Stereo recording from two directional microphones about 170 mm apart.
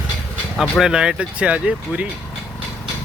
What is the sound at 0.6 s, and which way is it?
Speech, 5° right (ahead or behind).